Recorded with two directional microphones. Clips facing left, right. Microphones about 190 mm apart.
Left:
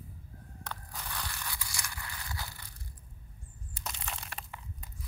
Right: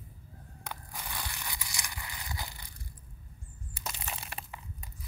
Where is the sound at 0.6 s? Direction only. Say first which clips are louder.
Right 1 dB; 10° right (ahead or behind).